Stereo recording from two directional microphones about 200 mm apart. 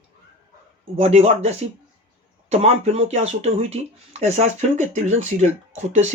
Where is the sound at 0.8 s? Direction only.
30° right (ahead or behind).